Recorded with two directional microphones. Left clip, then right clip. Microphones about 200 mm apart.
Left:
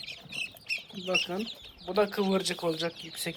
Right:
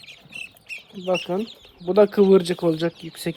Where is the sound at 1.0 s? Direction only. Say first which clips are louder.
Right 6 dB; 50° right (ahead or behind).